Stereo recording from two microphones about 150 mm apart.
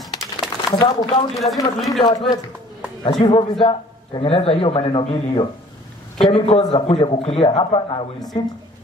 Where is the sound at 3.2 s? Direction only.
30° left (ahead or behind).